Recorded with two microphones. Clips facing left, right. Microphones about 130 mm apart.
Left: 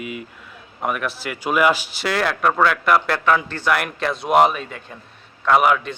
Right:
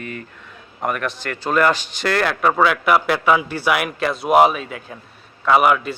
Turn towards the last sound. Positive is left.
turn(degrees=-5)  # may be behind; listen again after turning